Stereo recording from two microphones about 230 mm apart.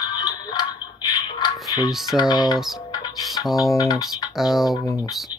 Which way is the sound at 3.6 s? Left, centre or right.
Centre.